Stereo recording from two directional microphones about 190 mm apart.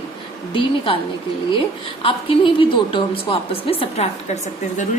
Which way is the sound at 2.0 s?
25° left (ahead or behind).